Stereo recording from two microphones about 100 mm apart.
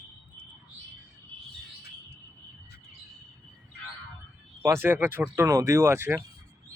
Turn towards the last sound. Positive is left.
turn(degrees=-25)  # may be behind; listen again after turning